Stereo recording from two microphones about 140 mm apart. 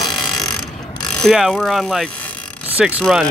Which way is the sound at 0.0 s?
Centre (ahead or behind).